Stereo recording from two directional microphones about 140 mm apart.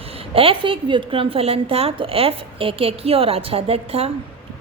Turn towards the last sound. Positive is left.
turn(degrees=-45)  # may be behind; listen again after turning